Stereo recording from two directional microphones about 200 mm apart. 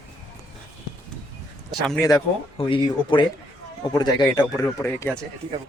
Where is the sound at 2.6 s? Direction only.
25° left (ahead or behind); by 5.2 s 10° left (ahead or behind).